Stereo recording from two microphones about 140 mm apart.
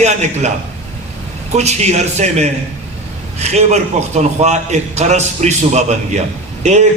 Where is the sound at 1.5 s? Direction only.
50° right (ahead or behind).